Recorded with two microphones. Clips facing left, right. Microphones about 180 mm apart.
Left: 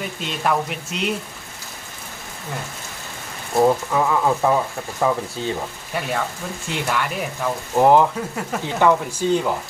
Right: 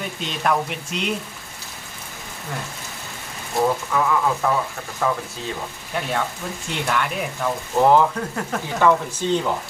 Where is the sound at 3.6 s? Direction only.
25° left (ahead or behind).